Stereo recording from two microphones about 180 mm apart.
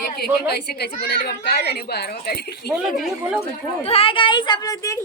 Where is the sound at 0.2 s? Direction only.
60° left (ahead or behind).